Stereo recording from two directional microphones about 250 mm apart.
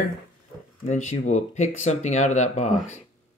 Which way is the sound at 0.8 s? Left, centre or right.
Left.